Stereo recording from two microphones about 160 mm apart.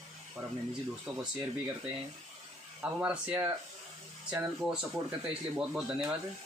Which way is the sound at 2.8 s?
10° right (ahead or behind).